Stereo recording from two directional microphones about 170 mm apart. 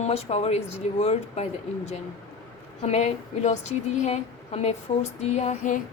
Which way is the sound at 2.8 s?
40° left (ahead or behind).